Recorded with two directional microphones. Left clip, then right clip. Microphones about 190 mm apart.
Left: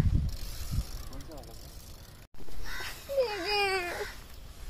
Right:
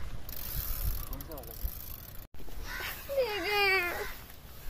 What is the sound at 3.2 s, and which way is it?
Baby cry, 30° left (ahead or behind).